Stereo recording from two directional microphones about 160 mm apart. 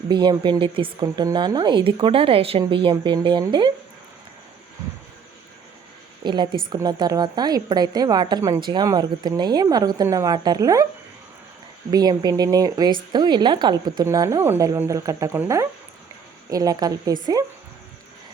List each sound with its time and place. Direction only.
0.1 s a woman's voice: 30° right (ahead or behind)
6.2 s a woman's voice: 30° right (ahead or behind)
11.9 s a woman's voice: 25° right (ahead or behind)